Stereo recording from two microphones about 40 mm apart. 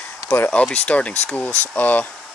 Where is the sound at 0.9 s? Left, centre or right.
Left.